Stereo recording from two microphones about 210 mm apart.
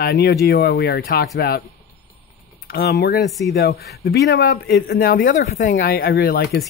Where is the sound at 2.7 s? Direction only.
50° left (ahead or behind).